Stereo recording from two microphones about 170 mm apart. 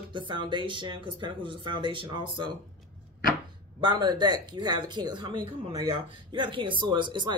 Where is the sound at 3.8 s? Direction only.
25° right (ahead or behind).